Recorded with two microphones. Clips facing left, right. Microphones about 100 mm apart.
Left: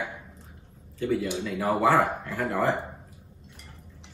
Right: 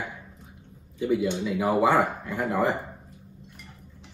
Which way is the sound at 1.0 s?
15° right (ahead or behind).